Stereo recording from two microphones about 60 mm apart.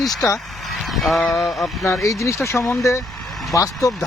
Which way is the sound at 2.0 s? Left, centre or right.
Left.